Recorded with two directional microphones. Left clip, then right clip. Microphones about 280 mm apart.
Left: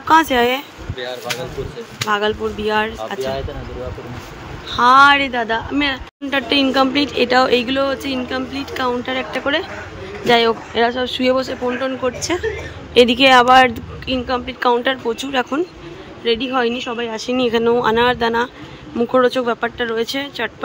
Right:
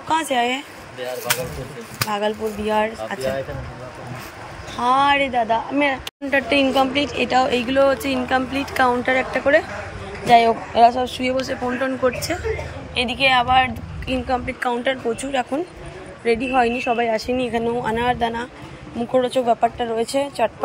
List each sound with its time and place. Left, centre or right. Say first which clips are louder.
0.1 s a woman's voice: left 7 dB; centre
2.0 s speech: left 5 dB; centre
4.7 s a woman's voice: left 7 dB; centre
12.9 s a woman's voice: left 7 dB; centre
14.2 s a woman's voice: left 5 dB; centre
16.5 s a woman's voice: right 1 dB; centre